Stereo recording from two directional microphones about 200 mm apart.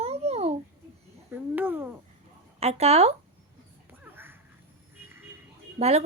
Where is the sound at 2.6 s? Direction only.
30° right (ahead or behind).